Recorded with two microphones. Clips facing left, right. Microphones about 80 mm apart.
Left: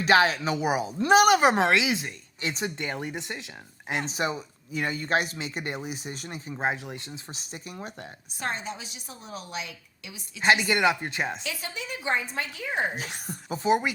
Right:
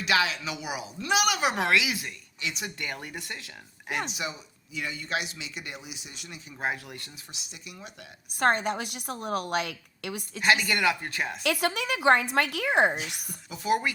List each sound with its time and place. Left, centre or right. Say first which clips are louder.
0.0 s speech: left 5 dB; left
1.6 s speech: left 2 dB; left
2.4 s speech: left 4 dB; left
6.5 s speech: left 3 dB; left
7.3 s speech: left 6 dB; left
8.4 s a woman's voice: right 8 dB; right
10.4 s speech: left 2 dB; left
11.4 s a woman's voice: right 8 dB; right
13.2 s speech: left 5 dB; left